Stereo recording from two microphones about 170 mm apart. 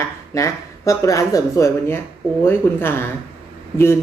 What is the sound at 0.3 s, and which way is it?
Speech, 20° left (ahead or behind).